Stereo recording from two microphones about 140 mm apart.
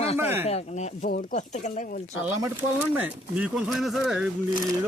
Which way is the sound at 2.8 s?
10° right (ahead or behind).